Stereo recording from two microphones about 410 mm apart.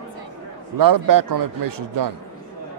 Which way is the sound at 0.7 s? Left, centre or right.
Right.